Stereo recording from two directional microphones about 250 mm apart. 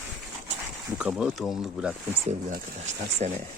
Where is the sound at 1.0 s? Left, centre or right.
Centre.